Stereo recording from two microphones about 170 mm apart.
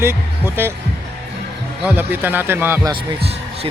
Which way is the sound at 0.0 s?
15° right (ahead or behind).